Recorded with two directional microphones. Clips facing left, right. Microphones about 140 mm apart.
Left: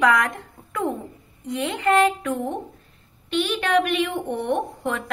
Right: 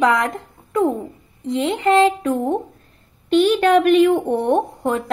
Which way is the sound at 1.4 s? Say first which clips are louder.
Right 5 dB; 30° right (ahead or behind).